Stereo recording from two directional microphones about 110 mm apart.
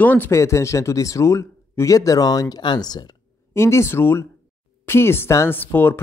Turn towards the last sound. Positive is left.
turn(degrees=20)  # may be behind; listen again after turning